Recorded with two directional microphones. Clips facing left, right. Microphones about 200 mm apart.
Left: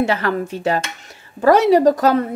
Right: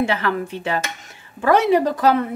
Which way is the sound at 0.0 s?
40° left (ahead or behind).